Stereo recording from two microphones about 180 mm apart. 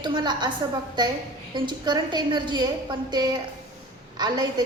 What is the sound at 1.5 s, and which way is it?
A woman's voice, 25° right (ahead or behind).